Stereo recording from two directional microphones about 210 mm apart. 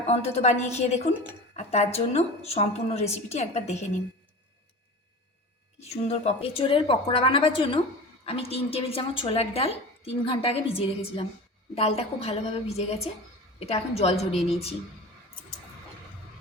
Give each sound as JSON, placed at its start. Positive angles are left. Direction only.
{"t": 0.1, "sound": "a woman's voice", "side_deg": 30}
{"t": 5.8, "sound": "a woman's voice", "side_deg": 30}